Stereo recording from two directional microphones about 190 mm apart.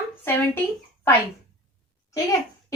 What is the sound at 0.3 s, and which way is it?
Speech, 10° left (ahead or behind).